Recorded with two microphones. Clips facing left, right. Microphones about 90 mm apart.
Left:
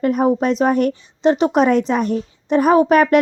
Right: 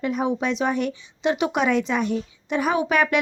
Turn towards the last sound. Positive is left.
turn(degrees=45)  # may be behind; listen again after turning